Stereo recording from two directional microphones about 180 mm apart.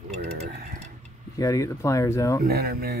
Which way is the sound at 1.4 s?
20° left (ahead or behind).